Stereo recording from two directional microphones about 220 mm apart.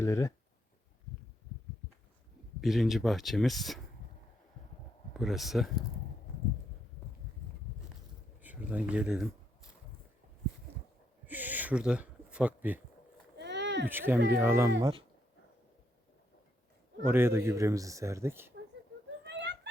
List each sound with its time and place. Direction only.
0.0 s speech: 15° left (ahead or behind)
2.6 s speech: centre (ahead or behind)
5.1 s speech: centre (ahead or behind)
8.4 s speech: 5° right (ahead or behind)
11.3 s speech: 10° right (ahead or behind)
13.3 s a sound: 50° right (ahead or behind)
13.8 s speech: 10° right (ahead or behind)
14.8 s speech: 20° right (ahead or behind)
17.1 s speech: 10° right (ahead or behind)
19.2 s cat: 50° right (ahead or behind)